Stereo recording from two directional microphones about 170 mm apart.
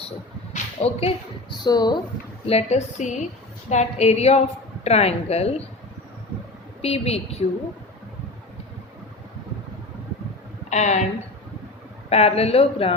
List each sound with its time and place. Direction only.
0.5 s speech: 35° left (ahead or behind)
2.5 s speech: 40° left (ahead or behind)
6.8 s speech: 35° left (ahead or behind)
10.7 s a woman's voice: 45° left (ahead or behind)
12.0 s speech: 35° left (ahead or behind)